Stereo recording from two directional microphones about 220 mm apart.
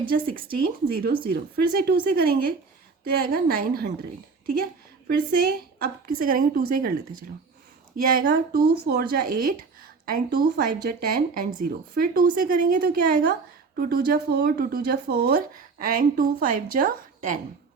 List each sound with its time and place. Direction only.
0.3 s speech: 40° right (ahead or behind)
5.0 s speech: 40° right (ahead or behind)
7.9 s speech: 40° right (ahead or behind)